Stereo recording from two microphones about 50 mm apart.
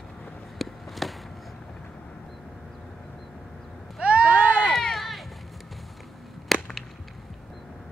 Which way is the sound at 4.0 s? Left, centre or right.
Right.